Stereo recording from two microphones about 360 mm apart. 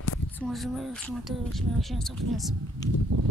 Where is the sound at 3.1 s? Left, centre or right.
Right.